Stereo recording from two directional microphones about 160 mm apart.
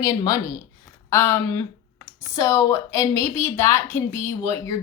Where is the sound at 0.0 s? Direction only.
20° left (ahead or behind).